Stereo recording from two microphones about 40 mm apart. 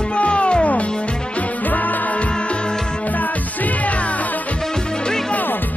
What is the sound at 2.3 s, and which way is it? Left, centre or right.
Music, left.